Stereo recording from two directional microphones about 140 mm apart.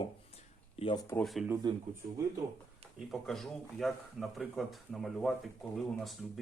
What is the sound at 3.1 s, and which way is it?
Speech, centre (ahead or behind).